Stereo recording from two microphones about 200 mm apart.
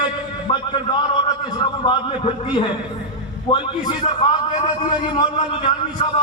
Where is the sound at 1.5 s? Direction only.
20° left (ahead or behind).